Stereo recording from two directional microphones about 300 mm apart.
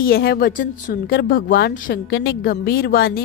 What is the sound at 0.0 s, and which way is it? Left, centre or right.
A woman's voice, left.